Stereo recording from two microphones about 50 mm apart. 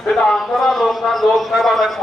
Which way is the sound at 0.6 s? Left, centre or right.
Centre.